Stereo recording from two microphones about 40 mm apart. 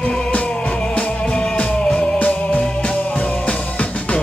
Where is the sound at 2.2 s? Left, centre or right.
Left.